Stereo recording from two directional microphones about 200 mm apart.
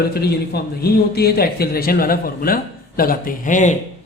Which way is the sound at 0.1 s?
50° left (ahead or behind).